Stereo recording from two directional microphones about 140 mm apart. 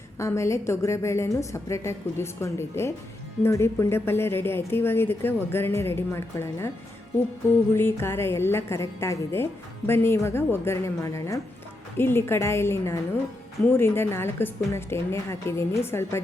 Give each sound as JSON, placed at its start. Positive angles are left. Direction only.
{"t": 0.2, "sound": "a woman's voice", "side_deg": 20}
{"t": 7.7, "sound": "a woman's voice", "side_deg": 15}